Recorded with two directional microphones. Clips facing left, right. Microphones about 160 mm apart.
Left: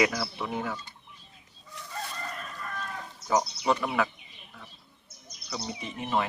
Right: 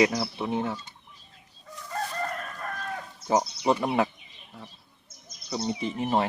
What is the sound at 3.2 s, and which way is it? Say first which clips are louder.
Speech: right 2 dB; 30° right (ahead or behind).